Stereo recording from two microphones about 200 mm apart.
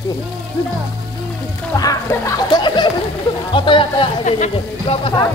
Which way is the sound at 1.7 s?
15° left (ahead or behind).